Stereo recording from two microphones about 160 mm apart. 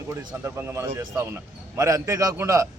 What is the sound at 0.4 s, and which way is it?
Speech, 15° right (ahead or behind).